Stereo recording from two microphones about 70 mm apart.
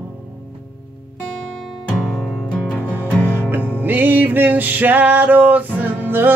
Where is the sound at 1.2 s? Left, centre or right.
Centre.